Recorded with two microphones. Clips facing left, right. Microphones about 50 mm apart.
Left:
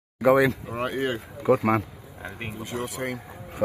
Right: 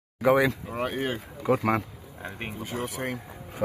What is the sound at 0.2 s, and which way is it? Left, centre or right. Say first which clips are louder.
Speech: left 2 dB; centre.